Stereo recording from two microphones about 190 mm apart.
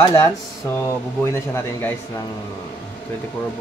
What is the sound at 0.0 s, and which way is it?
Speech, 20° left (ahead or behind).